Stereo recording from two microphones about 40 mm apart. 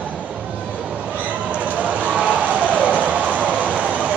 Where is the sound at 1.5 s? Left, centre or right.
Right.